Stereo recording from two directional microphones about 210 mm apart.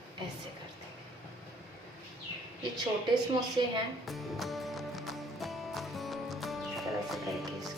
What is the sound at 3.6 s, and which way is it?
Speech, 20° right (ahead or behind).